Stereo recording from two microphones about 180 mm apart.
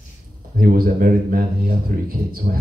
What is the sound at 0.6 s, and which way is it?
Speech, 50° right (ahead or behind).